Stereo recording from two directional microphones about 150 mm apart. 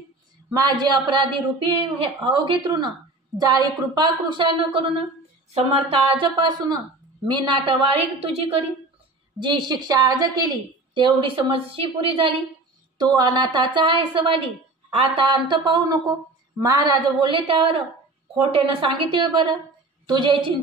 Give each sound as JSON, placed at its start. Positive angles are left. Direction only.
{"t": 0.5, "sound": "a woman's voice", "side_deg": -25}